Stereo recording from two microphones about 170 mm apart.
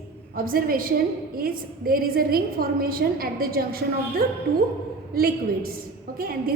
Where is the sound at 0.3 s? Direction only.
60° right (ahead or behind).